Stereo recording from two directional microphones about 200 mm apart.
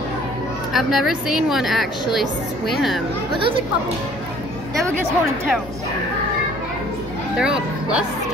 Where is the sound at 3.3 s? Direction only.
25° right (ahead or behind).